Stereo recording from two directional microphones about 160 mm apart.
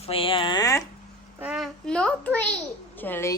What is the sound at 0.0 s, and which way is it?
Speech, 35° left (ahead or behind).